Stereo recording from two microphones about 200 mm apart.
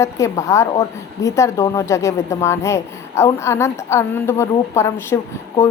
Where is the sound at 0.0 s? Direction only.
15° left (ahead or behind).